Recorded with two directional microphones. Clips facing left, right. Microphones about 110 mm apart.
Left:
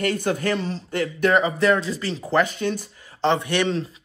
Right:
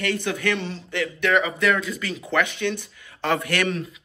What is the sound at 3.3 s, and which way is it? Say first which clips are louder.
Speech: right 1 dB; 25° left (ahead or behind).